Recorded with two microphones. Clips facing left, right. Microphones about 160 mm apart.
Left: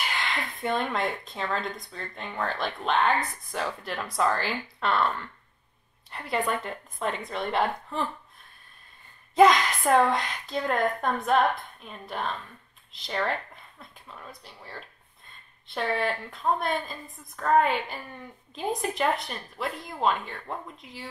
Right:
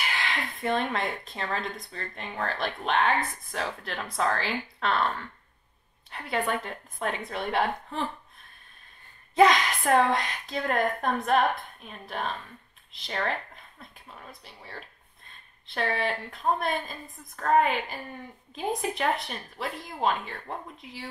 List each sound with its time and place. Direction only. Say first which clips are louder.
0.0 s speech: even; centre (ahead or behind)
9.3 s speech: left 2 dB; centre (ahead or behind)
12.1 s speech: left 1 dB; centre (ahead or behind)
14.4 s speech: left 1 dB; centre (ahead or behind)